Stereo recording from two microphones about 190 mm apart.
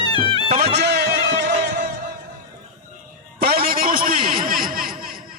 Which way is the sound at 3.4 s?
55° right (ahead or behind).